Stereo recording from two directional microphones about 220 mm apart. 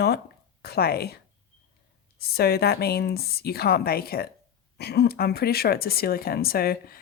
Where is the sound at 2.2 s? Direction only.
45° left (ahead or behind).